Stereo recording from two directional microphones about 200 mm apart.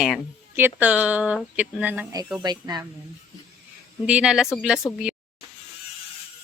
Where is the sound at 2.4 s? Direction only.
20° right (ahead or behind).